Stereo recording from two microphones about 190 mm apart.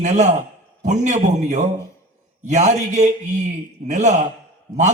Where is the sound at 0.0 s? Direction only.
40° right (ahead or behind).